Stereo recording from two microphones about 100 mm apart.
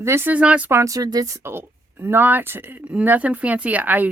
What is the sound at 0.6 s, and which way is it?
A woman's voice, 30° right (ahead or behind).